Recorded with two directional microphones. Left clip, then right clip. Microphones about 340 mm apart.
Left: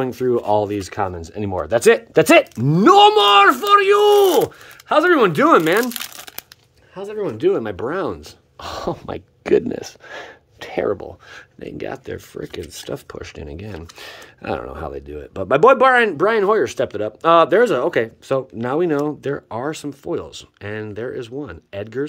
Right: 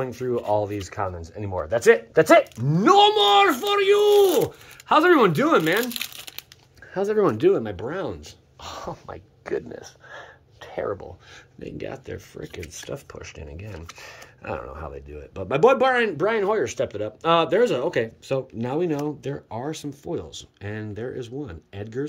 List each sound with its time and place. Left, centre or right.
0.0 s speech: left
6.9 s speech: centre
7.4 s speech: centre; by 11.1 s left
11.3 s speech: centre